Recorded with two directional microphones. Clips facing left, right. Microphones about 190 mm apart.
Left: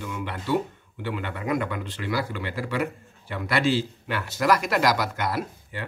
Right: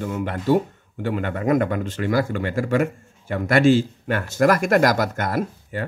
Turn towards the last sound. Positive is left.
turn(degrees=-45)  # may be behind; listen again after turning